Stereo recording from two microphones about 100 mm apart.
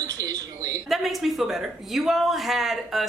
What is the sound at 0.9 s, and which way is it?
A woman's voice, centre (ahead or behind).